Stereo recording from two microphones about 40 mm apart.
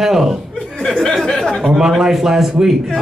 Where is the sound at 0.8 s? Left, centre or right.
Centre.